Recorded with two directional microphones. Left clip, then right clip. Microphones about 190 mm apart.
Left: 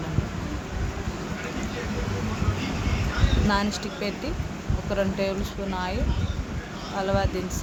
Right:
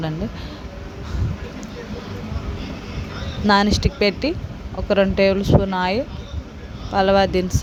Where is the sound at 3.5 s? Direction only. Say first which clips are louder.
Right 12 dB; 40° right (ahead or behind).